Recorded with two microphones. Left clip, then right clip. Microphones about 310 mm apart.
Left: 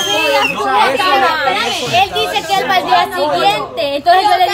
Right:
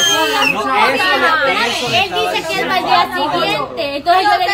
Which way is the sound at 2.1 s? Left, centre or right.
Left.